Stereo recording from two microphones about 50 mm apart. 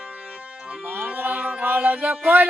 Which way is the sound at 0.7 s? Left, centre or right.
Right.